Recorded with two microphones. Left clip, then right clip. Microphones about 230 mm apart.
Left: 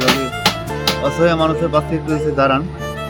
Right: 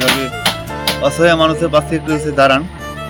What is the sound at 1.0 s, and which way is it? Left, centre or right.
Speech, left.